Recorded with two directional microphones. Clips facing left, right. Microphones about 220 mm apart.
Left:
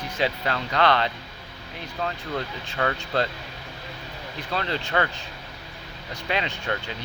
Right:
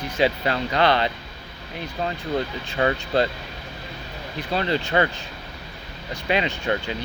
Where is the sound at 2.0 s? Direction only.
20° right (ahead or behind).